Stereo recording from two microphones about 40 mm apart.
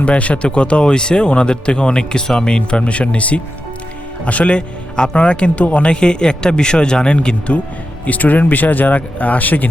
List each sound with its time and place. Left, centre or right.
0.0 s speech: left
8.0 s speech: left